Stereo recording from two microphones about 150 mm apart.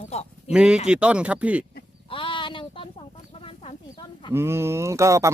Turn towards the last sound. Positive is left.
turn(degrees=-20)  # may be behind; listen again after turning